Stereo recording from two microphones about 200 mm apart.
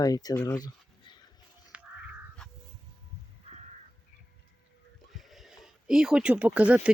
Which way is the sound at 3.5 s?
30° right (ahead or behind).